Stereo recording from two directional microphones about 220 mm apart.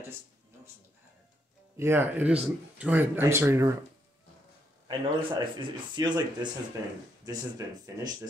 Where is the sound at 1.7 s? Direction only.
10° right (ahead or behind).